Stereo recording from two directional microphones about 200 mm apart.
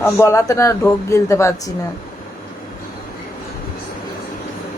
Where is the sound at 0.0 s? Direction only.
15° left (ahead or behind).